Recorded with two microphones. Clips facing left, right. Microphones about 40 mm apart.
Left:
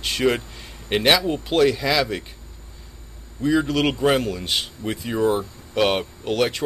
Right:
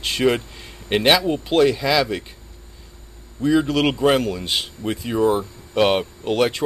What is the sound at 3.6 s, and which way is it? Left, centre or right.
Speech, right.